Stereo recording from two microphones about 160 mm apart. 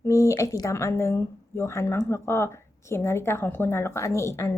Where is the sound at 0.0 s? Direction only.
20° left (ahead or behind).